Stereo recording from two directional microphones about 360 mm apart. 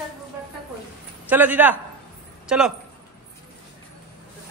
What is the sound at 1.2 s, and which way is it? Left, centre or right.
A man's voice, centre.